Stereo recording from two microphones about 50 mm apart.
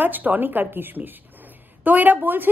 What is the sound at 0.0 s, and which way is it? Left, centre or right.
A woman's voice, right.